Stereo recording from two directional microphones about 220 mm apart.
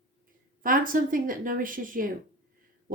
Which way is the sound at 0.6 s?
40° right (ahead or behind).